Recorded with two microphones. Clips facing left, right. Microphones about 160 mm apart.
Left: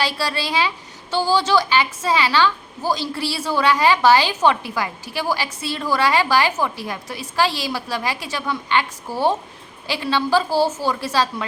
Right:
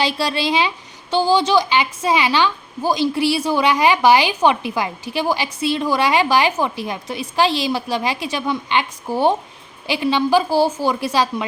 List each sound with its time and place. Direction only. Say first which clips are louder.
0.0 s a woman's voice: right 3 dB; 20° right (ahead or behind)